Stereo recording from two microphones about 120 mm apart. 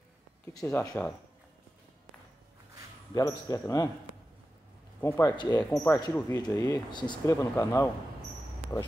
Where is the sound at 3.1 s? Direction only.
30° left (ahead or behind).